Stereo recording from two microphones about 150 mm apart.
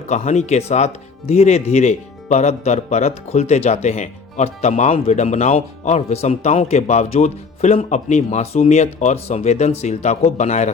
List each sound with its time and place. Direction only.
0.1 s speech: 50° left (ahead or behind)